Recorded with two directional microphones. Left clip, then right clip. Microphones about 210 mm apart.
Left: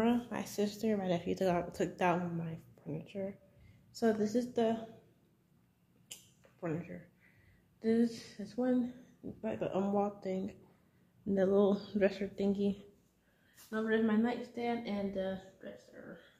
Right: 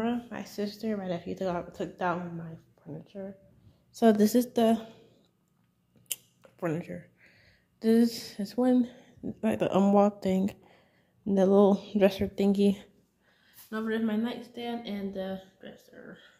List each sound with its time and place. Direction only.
0.0 s speech: centre (ahead or behind)
4.0 s speech: 45° right (ahead or behind)
6.6 s speech: 40° right (ahead or behind)
9.4 s speech: 50° right (ahead or behind)
11.2 s speech: 25° right (ahead or behind)
12.0 s speech: 30° right (ahead or behind)
14.2 s speech: 15° right (ahead or behind)